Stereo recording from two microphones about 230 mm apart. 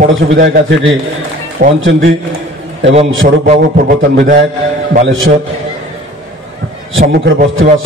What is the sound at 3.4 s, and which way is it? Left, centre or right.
A man's voice, right.